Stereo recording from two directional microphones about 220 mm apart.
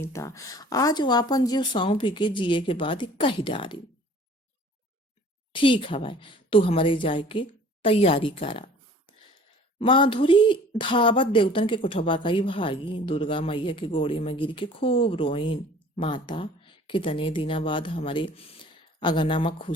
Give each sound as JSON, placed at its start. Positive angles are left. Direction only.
{"t": 0.0, "sound": "speech", "side_deg": 15}
{"t": 5.5, "sound": "speech", "side_deg": 25}
{"t": 9.7, "sound": "speech", "side_deg": 20}